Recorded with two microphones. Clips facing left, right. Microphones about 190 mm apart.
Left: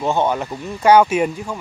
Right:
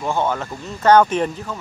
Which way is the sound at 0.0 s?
20° left (ahead or behind).